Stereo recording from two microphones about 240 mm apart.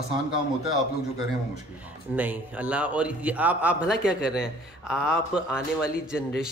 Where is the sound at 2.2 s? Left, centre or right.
Centre.